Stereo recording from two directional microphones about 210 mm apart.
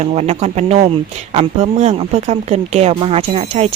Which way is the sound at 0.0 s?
30° right (ahead or behind).